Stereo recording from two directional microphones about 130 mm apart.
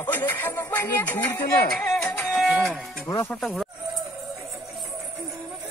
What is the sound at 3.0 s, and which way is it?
Speech, 25° left (ahead or behind).